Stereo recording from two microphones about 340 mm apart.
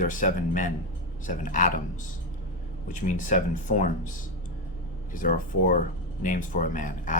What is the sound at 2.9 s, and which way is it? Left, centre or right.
Speech, left.